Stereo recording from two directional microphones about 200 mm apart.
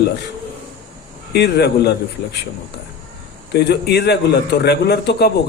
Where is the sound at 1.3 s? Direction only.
55° left (ahead or behind).